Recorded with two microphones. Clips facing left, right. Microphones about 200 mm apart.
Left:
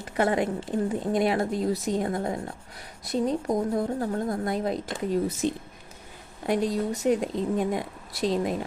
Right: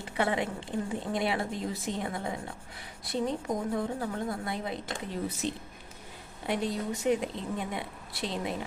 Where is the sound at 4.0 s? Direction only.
45° left (ahead or behind).